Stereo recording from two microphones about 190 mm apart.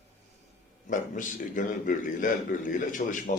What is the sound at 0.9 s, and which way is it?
Speech, 45° left (ahead or behind).